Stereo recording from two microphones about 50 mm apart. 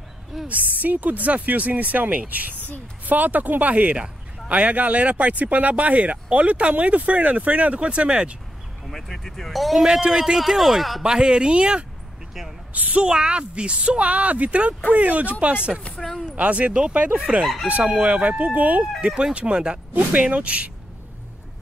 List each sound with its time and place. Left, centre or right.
0.5 s speech: right
8.9 s speech: centre
9.8 s a man's voice: centre
11.0 s a man's voice: centre
12.7 s a woman's voice: right
13.0 s speech: centre
16.0 s speech: centre
16.3 s speech: right
18.9 s speech: right